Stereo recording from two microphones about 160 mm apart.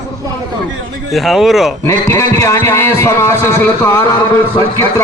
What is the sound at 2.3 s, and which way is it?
A man's voice, 20° left (ahead or behind).